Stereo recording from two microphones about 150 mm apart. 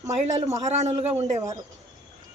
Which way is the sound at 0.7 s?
45° right (ahead or behind).